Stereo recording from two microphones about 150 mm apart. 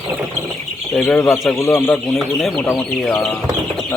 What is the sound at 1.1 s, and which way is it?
Speech, 15° left (ahead or behind).